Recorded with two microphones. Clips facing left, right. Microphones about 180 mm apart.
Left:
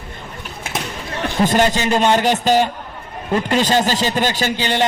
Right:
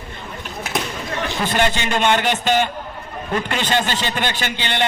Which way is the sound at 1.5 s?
40° left (ahead or behind).